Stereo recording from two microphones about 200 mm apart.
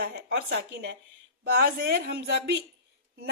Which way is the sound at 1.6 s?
50° right (ahead or behind).